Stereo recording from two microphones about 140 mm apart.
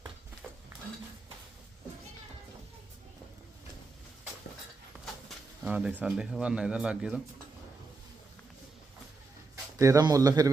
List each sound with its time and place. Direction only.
5.6 s speech: 5° right (ahead or behind)
9.7 s speech: 25° right (ahead or behind)